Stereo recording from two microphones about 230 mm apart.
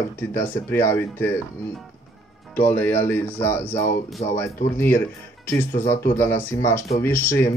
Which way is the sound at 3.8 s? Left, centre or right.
Left.